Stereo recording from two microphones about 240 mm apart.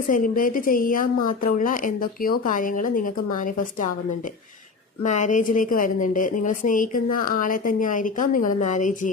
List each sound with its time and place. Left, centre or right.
0.1 s a woman's voice: left
5.0 s a woman's voice: left